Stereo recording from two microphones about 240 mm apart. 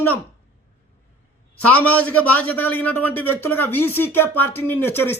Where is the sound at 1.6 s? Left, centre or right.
Centre.